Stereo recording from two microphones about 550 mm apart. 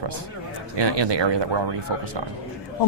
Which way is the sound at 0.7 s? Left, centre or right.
Right.